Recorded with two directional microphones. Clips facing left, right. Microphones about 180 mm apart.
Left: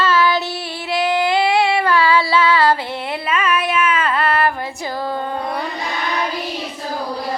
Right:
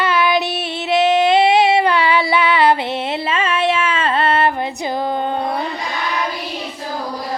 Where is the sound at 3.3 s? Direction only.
25° right (ahead or behind).